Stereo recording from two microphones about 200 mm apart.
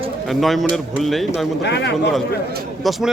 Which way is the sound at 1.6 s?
60° left (ahead or behind).